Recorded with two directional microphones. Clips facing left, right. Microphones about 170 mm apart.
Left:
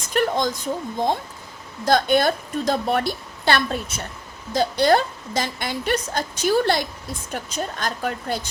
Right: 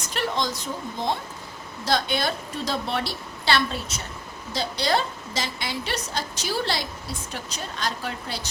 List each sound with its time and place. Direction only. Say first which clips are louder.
0.1 s a woman's voice: left 6 dB; 50° left (ahead or behind)